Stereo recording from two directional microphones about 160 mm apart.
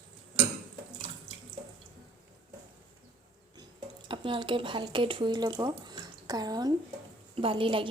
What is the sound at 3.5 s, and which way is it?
A woman's voice, 30° right (ahead or behind).